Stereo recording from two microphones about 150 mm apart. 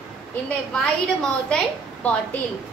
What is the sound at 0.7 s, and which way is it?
A woman's voice, 5° left (ahead or behind).